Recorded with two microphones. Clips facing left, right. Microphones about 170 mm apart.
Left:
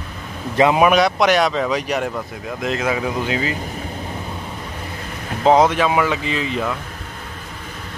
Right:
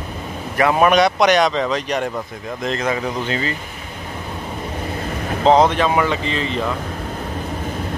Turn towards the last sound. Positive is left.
turn(degrees=5)  # may be behind; listen again after turning